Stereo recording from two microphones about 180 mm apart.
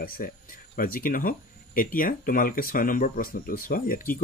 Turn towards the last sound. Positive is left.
turn(degrees=50)  # may be behind; listen again after turning